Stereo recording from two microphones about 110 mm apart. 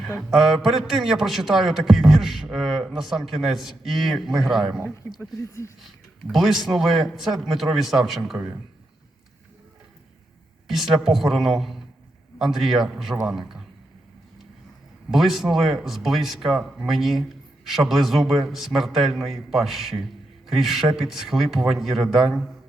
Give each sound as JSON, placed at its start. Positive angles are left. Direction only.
{"t": 0.2, "sound": "a man's voice", "side_deg": -5}
{"t": 5.4, "sound": "speech", "side_deg": 25}
{"t": 5.8, "sound": "a man's voice", "side_deg": 0}
{"t": 10.7, "sound": "a man's voice", "side_deg": 0}
{"t": 15.1, "sound": "a man's voice", "side_deg": 0}